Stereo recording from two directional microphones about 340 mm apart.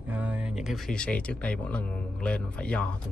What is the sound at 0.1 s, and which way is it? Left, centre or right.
Speech, centre.